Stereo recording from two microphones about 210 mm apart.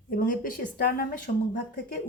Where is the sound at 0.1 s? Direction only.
40° left (ahead or behind).